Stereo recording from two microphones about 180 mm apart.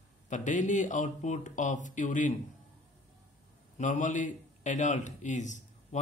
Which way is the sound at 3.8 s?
45° left (ahead or behind).